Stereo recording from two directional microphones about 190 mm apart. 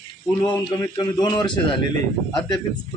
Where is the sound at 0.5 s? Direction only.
20° left (ahead or behind).